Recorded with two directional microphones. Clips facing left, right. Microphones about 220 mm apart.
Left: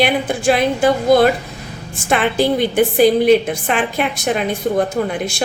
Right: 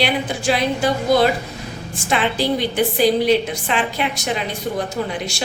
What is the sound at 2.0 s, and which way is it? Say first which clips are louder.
Speech: left 4 dB; 50° left (ahead or behind).